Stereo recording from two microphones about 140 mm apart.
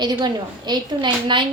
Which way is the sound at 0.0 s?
30° right (ahead or behind).